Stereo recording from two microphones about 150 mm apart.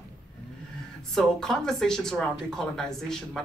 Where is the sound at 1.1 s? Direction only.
Centre (ahead or behind).